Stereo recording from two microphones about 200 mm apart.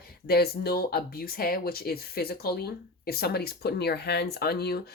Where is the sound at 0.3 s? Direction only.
50° left (ahead or behind).